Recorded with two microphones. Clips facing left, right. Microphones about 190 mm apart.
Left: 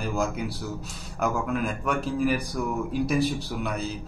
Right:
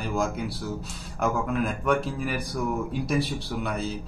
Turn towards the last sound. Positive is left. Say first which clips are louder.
# even
turn(degrees=0)  # may be behind; listen again after turning